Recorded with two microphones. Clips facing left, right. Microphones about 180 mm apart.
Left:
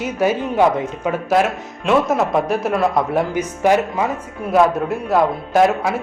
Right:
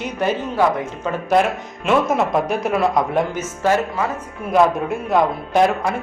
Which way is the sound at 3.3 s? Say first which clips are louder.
Left 3 dB; 15° left (ahead or behind).